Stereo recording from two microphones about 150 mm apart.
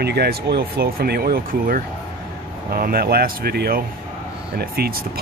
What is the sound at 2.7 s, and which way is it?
Speech, 85° right.